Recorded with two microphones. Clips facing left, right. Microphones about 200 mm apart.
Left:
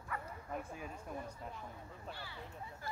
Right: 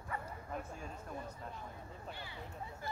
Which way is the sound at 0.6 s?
10° left (ahead or behind).